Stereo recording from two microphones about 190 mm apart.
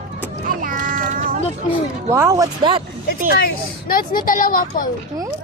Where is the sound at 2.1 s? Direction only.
15° right (ahead or behind).